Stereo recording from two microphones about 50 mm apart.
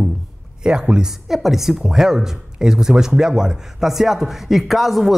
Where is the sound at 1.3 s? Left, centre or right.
Centre.